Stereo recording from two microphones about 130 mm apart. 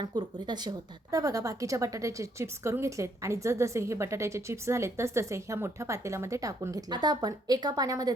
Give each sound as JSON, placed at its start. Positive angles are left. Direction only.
{"t": 0.0, "sound": "speech", "side_deg": -35}